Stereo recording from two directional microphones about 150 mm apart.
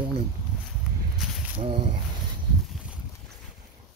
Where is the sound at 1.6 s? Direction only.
35° right (ahead or behind).